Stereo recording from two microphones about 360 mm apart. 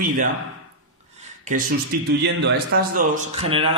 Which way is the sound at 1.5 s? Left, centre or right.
Right.